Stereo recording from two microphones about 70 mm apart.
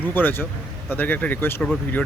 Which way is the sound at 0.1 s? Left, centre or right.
Left.